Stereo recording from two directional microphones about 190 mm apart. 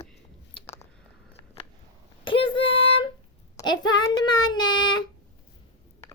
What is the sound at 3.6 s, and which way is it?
Child singing, 20° left (ahead or behind).